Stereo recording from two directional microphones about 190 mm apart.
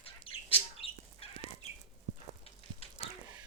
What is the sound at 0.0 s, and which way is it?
Bird, 30° left (ahead or behind).